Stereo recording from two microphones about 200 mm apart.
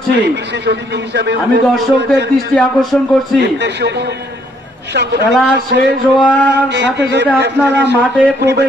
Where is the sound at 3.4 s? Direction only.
60° right (ahead or behind).